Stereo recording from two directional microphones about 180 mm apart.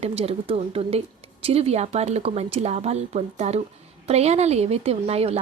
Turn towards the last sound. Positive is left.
turn(degrees=-35)  # may be behind; listen again after turning